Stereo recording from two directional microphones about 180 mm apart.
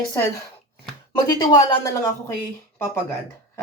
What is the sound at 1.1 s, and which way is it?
Speech, 25° left (ahead or behind).